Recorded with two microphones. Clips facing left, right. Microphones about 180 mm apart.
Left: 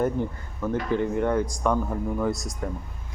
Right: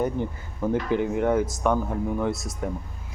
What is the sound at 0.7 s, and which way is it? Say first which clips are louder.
A man's voice: right 1 dB; 10° right (ahead or behind).